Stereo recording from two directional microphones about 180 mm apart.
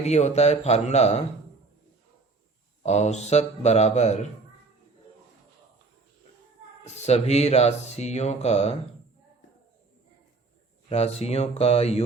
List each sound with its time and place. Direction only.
0.0 s speech: 40° left (ahead or behind)
2.8 s speech: 40° left (ahead or behind)
7.0 s speech: 35° left (ahead or behind)
10.8 s speech: 35° left (ahead or behind)